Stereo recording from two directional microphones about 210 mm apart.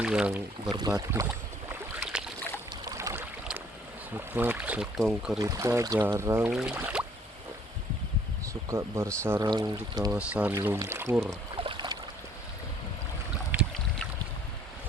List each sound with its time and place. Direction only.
0.0 s speech: 5° right (ahead or behind)
0.7 s speech: 20° right (ahead or behind)
2.8 s boat: 15° right (ahead or behind)
4.4 s speech: 10° right (ahead or behind)
5.4 s speech: 15° right (ahead or behind)
8.7 s speech: 15° right (ahead or behind)
10.1 s speech: 5° right (ahead or behind)
11.5 s boat: 25° right (ahead or behind)